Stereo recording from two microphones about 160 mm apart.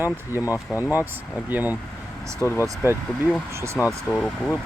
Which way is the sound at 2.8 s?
15° right (ahead or behind).